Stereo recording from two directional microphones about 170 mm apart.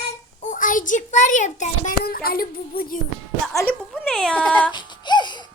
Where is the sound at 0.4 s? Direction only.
50° left (ahead or behind).